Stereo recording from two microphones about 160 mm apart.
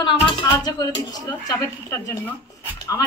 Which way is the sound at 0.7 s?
25° left (ahead or behind).